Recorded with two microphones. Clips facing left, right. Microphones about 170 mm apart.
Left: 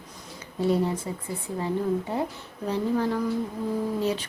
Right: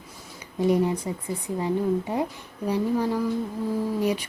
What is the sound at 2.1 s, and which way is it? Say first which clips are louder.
A woman's voice: right 2 dB; 15° right (ahead or behind).